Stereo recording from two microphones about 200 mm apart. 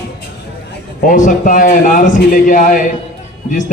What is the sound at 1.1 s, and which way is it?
A man's voice, 40° left (ahead or behind).